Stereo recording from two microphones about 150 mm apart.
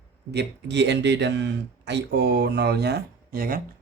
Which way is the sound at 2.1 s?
90° right.